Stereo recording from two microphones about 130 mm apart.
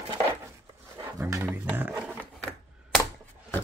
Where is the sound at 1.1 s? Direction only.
20° right (ahead or behind).